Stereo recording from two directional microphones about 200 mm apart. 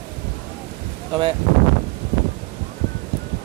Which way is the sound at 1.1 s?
25° right (ahead or behind).